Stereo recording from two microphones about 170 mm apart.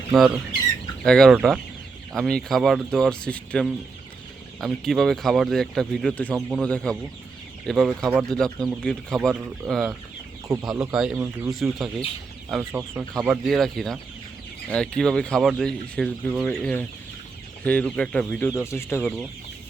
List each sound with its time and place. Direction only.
0.1 s speech: centre (ahead or behind)
11.2 s speech: 15° right (ahead or behind)
11.6 s speech: centre (ahead or behind)
12.7 s speech: 10° right (ahead or behind); by 19.0 s 15° left (ahead or behind)
19.0 s speech: 5° right (ahead or behind)